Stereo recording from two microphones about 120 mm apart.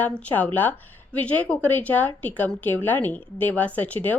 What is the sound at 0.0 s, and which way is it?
A woman's voice, 10° left (ahead or behind).